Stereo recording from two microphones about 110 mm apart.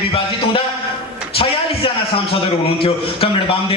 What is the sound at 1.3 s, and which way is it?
Speech, 60° left (ahead or behind).